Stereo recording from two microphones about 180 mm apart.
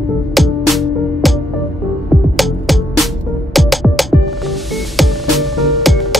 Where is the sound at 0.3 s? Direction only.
Centre (ahead or behind).